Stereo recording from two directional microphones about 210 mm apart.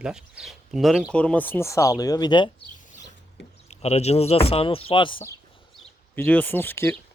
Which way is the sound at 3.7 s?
30° left (ahead or behind).